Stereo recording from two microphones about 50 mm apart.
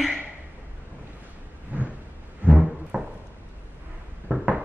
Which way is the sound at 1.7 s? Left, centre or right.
Right.